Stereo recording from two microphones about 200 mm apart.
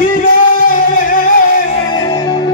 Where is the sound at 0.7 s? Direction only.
40° left (ahead or behind).